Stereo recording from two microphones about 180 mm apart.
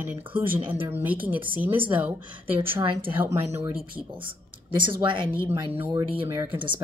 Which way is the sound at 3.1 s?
15° right (ahead or behind).